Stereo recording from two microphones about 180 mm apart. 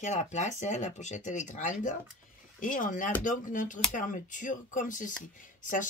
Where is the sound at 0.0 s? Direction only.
40° left (ahead or behind).